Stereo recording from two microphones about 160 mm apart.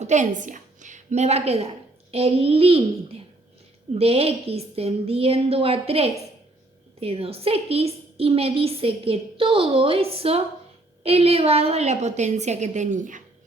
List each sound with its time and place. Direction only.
0.0 s a woman's voice: 50° right (ahead or behind)